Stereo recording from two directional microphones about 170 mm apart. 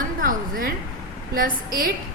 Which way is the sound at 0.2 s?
55° right (ahead or behind).